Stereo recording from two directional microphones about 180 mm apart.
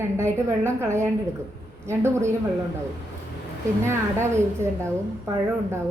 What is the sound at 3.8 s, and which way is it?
A woman's voice, 15° right (ahead or behind).